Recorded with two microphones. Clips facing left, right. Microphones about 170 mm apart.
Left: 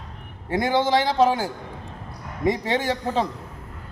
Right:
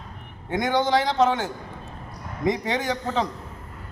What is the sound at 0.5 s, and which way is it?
Speech, 30° left (ahead or behind).